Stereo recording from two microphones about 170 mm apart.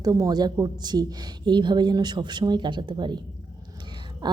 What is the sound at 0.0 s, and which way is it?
A woman's voice, 20° right (ahead or behind).